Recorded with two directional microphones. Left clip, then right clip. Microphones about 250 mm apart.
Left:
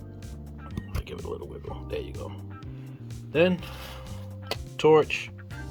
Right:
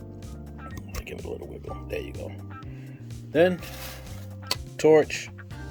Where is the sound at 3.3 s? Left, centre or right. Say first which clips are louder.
Right 2 dB; right.